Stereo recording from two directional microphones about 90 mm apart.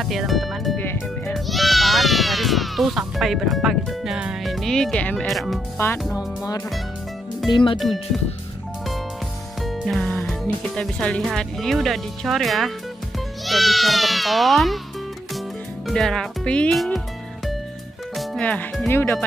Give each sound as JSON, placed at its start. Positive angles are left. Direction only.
{"t": 0.0, "sound": "speech", "side_deg": 0}
{"t": 0.7, "sound": "music", "side_deg": 25}
{"t": 1.3, "sound": "music", "side_deg": 0}
{"t": 5.2, "sound": "speech", "side_deg": 0}
{"t": 7.5, "sound": "speech", "side_deg": 60}
{"t": 7.8, "sound": "speech", "side_deg": 0}
{"t": 9.6, "sound": "music", "side_deg": 0}
{"t": 10.7, "sound": "speech", "side_deg": 5}
{"t": 15.9, "sound": "speech", "side_deg": 5}
{"t": 16.7, "sound": "speech", "side_deg": 0}
{"t": 18.1, "sound": "music", "side_deg": 0}
{"t": 18.4, "sound": "speech", "side_deg": 15}
{"t": 18.9, "sound": "speech", "side_deg": 30}